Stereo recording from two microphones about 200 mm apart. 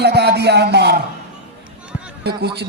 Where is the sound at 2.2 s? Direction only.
55° right (ahead or behind).